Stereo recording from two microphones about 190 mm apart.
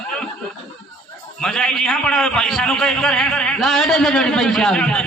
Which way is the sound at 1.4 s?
5° left (ahead or behind).